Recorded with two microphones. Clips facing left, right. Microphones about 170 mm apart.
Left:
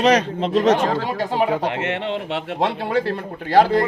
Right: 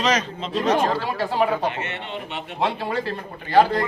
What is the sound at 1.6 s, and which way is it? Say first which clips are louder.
Speech: left 4 dB; 90° left.